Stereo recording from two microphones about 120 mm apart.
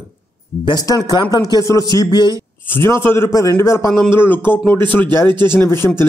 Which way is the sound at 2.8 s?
20° left (ahead or behind).